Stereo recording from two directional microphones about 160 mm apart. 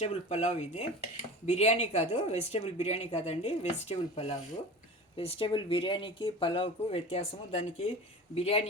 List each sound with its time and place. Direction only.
0.0 s speech: 40° left (ahead or behind)